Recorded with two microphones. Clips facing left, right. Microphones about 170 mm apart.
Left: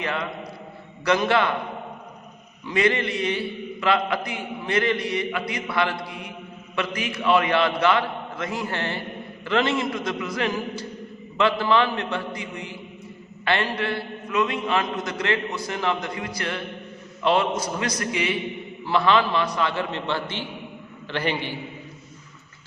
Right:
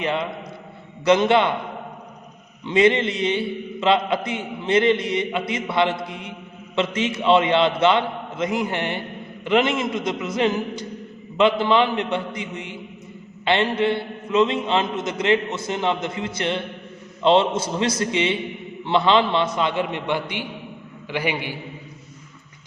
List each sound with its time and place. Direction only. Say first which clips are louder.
0.0 s a man's voice: right 4 dB; 20° right (ahead or behind)
2.6 s a man's voice: right 5 dB; 20° right (ahead or behind)